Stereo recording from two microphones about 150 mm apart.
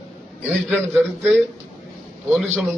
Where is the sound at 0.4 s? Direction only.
Centre (ahead or behind).